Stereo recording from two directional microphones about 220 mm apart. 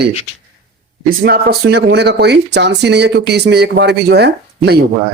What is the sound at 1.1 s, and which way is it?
A man's voice, 45° right (ahead or behind).